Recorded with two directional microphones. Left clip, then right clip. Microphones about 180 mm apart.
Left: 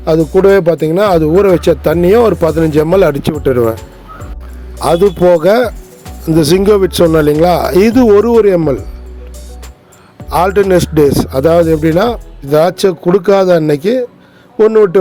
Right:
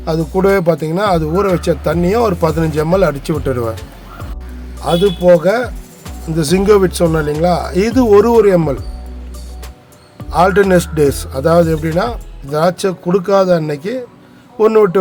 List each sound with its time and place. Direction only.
0.0 s speech: 20° left (ahead or behind)
4.8 s speech: 50° left (ahead or behind)
6.3 s speech: 40° left (ahead or behind)
10.2 s speech: 40° left (ahead or behind)
14.6 s speech: 25° left (ahead or behind)